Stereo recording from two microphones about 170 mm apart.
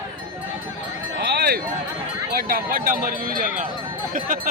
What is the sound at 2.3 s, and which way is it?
Speech, 60° right (ahead or behind).